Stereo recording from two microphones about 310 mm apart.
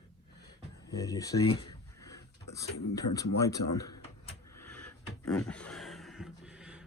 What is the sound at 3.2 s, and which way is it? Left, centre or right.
Speech, centre.